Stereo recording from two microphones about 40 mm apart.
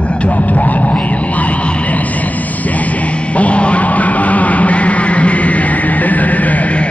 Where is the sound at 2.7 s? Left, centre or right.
Left.